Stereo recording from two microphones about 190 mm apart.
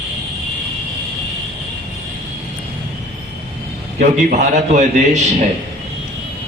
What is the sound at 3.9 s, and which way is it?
A man's voice, 40° right (ahead or behind).